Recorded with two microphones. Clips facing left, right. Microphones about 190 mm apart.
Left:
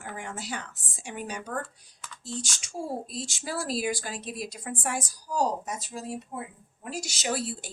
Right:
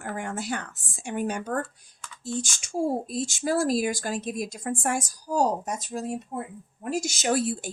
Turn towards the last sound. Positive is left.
turn(degrees=-50)  # may be behind; listen again after turning